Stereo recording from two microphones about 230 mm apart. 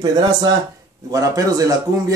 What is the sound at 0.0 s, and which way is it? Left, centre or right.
Speech, centre.